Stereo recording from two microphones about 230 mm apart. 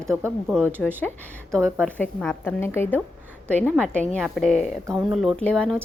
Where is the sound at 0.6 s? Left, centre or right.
Centre.